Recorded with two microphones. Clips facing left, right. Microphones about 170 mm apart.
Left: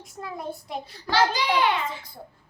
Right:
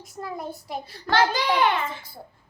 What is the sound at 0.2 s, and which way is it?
Speech, centre (ahead or behind).